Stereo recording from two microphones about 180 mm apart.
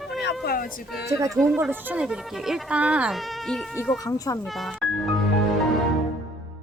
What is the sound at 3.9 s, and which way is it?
Speech, 20° left (ahead or behind).